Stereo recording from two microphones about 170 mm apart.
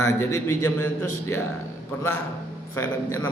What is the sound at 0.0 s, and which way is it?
Speech, 20° left (ahead or behind).